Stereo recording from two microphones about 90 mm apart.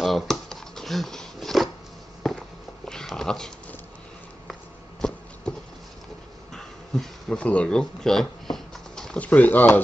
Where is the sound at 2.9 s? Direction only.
5° left (ahead or behind).